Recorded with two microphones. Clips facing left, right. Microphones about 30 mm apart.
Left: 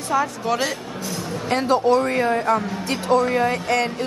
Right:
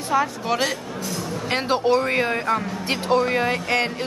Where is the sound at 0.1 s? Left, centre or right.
Centre.